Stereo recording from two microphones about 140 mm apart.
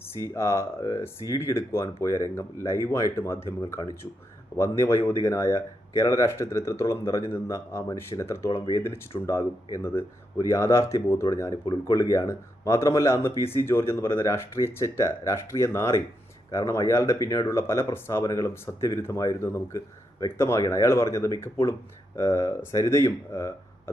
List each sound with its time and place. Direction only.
0.3 s speech: 20° left (ahead or behind)